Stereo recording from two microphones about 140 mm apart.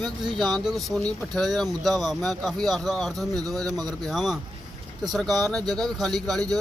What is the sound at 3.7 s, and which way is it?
Speech, 25° right (ahead or behind).